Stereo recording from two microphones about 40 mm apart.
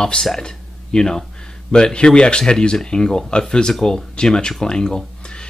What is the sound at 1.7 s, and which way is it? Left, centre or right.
Speech, left.